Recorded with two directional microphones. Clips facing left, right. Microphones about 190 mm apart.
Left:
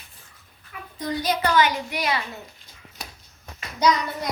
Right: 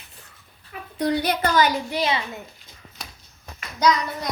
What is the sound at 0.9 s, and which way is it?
A woman's voice, 65° right (ahead or behind).